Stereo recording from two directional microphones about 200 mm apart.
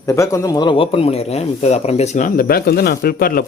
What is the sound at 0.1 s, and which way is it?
Speech, 15° left (ahead or behind).